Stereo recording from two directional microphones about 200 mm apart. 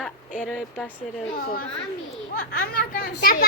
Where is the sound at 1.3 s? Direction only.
45° left (ahead or behind).